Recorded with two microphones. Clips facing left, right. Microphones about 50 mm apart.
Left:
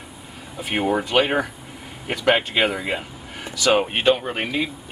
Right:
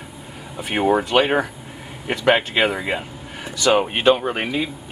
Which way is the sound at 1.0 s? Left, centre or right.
Centre.